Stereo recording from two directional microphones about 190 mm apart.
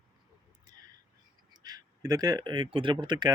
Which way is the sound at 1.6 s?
20° right (ahead or behind).